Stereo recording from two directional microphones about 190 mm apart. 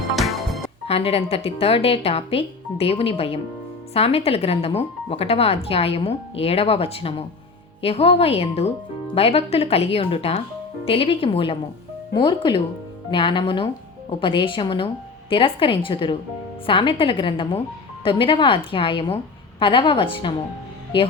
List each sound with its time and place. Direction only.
0.2 s music: centre (ahead or behind)
0.9 s a woman's voice: 30° left (ahead or behind)